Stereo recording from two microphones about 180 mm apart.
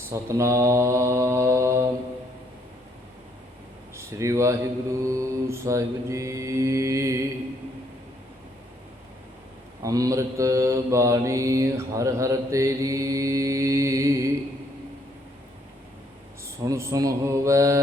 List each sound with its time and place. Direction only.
0.1 s mantra: 15° right (ahead or behind)
3.9 s mantra: 15° right (ahead or behind)
9.8 s mantra: 20° right (ahead or behind)
16.6 s mantra: 15° right (ahead or behind)